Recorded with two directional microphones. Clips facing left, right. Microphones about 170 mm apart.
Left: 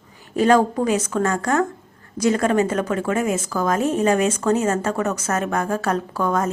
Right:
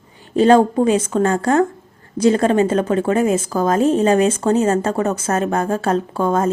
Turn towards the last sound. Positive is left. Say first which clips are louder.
# right 4 dB
turn(degrees=-25)  # may be behind; listen again after turning